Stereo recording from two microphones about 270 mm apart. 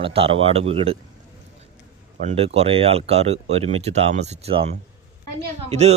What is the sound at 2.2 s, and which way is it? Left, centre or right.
Speech, right.